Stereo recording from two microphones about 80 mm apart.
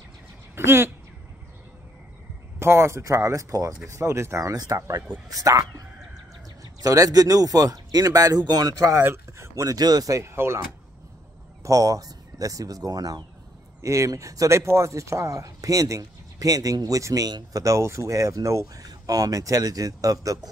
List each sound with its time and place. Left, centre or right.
0.6 s speech: right
2.6 s speech: right
4.5 s speech: right
8.9 s speech: right
9.6 s speech: right
11.6 s speech: right
13.7 s speech: right